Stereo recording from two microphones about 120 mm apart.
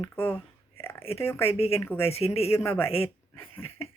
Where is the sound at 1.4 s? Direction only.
55° left (ahead or behind).